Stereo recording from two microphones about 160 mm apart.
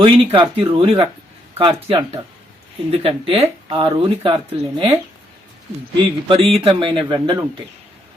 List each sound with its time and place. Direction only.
0.0 s speech: 35° right (ahead or behind)
6.0 s speech: 35° right (ahead or behind)